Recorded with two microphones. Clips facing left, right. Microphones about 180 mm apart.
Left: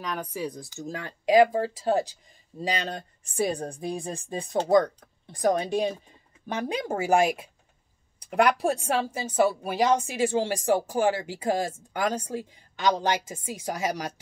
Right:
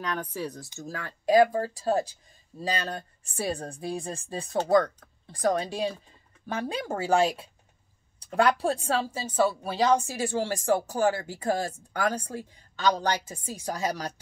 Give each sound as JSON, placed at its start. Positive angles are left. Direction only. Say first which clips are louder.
{"t": 0.0, "sound": "a woman's voice", "louder": "even", "side_deg": 5}